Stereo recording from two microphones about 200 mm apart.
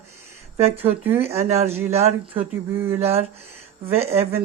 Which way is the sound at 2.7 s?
10° right (ahead or behind).